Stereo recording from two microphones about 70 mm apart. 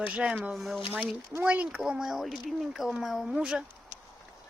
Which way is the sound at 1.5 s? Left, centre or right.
Centre.